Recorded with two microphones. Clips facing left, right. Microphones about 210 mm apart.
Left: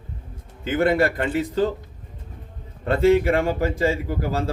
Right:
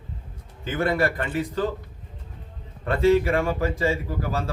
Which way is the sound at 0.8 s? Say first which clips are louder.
Left 4 dB; 25° left (ahead or behind).